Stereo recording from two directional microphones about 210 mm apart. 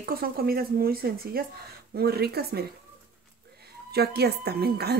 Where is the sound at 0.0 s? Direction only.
45° right (ahead or behind).